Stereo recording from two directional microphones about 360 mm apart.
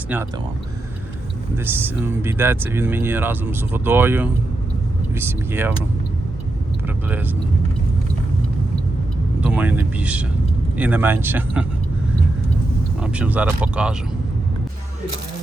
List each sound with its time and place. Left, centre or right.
1.5 s speech: centre
6.8 s speech: centre
9.4 s speech: centre
13.0 s speech: centre